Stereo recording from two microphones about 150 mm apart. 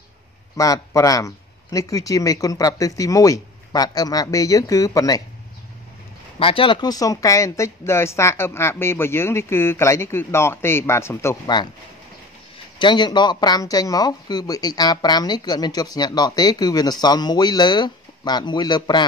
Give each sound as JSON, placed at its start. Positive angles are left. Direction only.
{"t": 0.6, "sound": "speech", "side_deg": 20}
{"t": 6.4, "sound": "speech", "side_deg": 35}
{"t": 11.4, "sound": "speech", "side_deg": 30}
{"t": 12.7, "sound": "speech", "side_deg": 30}